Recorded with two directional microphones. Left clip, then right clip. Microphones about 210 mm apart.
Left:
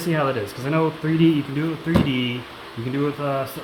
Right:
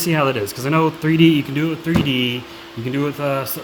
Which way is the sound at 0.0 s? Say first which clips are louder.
Right 4 dB; 55° right (ahead or behind).